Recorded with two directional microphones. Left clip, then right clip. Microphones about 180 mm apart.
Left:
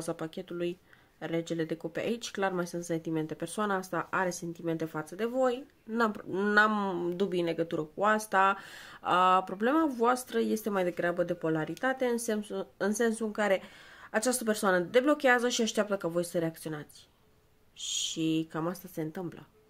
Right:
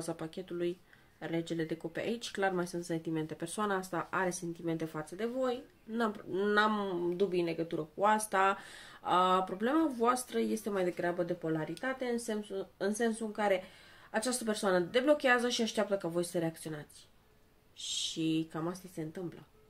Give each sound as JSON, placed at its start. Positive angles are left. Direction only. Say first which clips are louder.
{"t": 0.0, "sound": "speech", "louder": "left 4 dB", "side_deg": 30}